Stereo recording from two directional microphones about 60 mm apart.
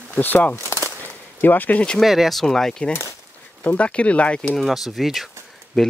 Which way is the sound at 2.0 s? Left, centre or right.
Centre.